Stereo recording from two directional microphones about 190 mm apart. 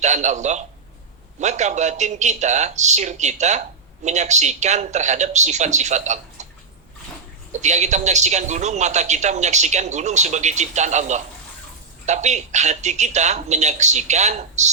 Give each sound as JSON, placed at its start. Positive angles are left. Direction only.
{"t": 0.0, "sound": "a man's voice", "side_deg": -40}
{"t": 7.6, "sound": "a man's voice", "side_deg": -40}